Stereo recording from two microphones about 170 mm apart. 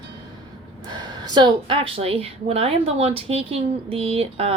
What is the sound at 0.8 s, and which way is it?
A woman's voice, 25° right (ahead or behind).